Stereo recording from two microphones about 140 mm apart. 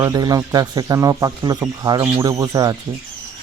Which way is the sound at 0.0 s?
25° right (ahead or behind).